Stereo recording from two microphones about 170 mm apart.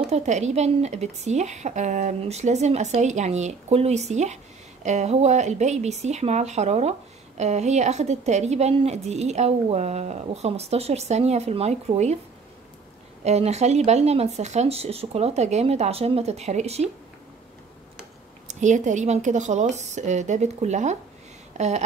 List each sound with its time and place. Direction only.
0.0 s speech: 40° right (ahead or behind)
13.2 s speech: 40° right (ahead or behind)
18.5 s a woman's voice: 45° right (ahead or behind)